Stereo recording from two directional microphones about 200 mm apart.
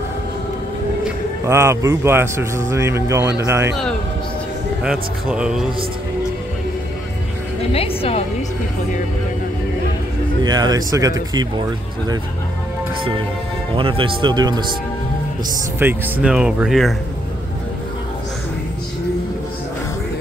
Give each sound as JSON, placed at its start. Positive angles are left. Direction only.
{"t": 1.0, "sound": "speech", "side_deg": -15}
{"t": 4.8, "sound": "speech", "side_deg": -5}
{"t": 7.7, "sound": "a woman's voice", "side_deg": 30}
{"t": 10.4, "sound": "speech", "side_deg": -20}
{"t": 13.7, "sound": "speech", "side_deg": -25}
{"t": 15.8, "sound": "speech", "side_deg": -5}